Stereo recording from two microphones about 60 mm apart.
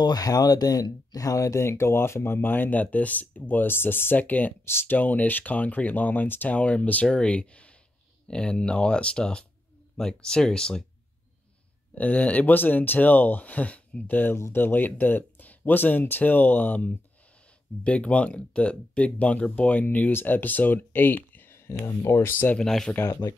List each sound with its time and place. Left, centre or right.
0.1 s speech: left
6.5 s speech: left
11.9 s speech: left
14.3 s speech: left
22.6 s speech: centre